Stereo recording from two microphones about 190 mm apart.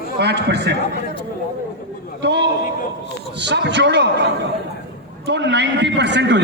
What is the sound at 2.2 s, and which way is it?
A man's voice, 60° right (ahead or behind).